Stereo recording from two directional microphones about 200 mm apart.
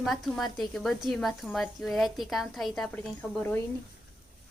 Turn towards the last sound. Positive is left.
turn(degrees=10)  # may be behind; listen again after turning